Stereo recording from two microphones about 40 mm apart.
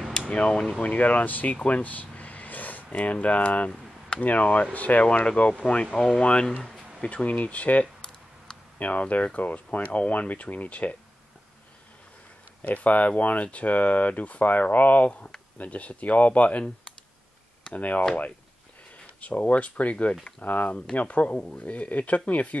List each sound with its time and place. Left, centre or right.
0.3 s speech: left
0.8 s speech: left
5.2 s speech: left
5.9 s speech: centre
7.0 s speech: left
7.8 s a sound: left
8.7 s speech: left
12.6 s speech: left
17.7 s speech: left
19.2 s speech: left